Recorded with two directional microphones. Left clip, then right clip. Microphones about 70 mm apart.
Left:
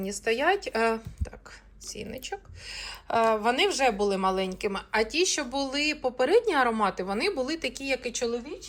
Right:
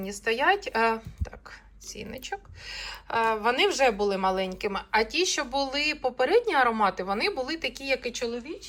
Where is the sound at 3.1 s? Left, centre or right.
Left.